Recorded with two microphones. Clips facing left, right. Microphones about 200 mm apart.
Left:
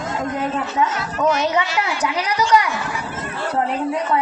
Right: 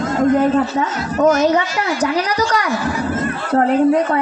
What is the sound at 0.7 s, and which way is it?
A woman's voice, 40° right (ahead or behind).